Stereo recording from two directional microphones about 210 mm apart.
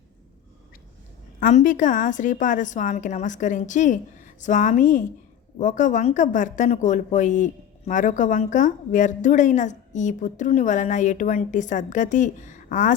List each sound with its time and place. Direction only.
1.4 s speech: 35° left (ahead or behind)